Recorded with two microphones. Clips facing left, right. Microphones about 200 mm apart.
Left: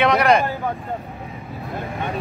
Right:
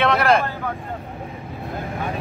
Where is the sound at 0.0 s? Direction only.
Centre (ahead or behind).